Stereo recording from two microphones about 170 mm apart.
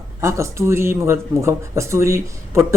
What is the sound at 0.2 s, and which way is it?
Speech, 15° right (ahead or behind).